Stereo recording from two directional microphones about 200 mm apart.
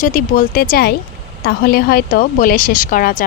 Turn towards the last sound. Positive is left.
turn(degrees=40)  # may be behind; listen again after turning